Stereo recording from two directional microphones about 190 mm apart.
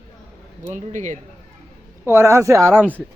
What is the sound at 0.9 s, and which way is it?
Speech, 40° right (ahead or behind).